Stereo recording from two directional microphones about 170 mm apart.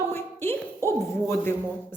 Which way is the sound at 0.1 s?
15° left (ahead or behind).